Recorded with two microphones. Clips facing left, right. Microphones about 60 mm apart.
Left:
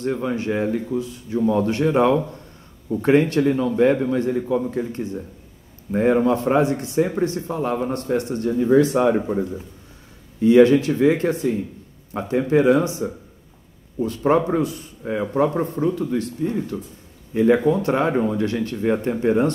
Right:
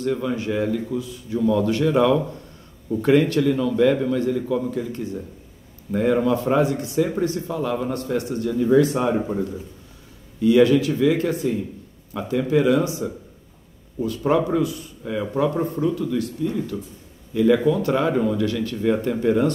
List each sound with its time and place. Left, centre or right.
0.0 s a man's voice: left
9.1 s speech: centre
10.4 s a man's voice: left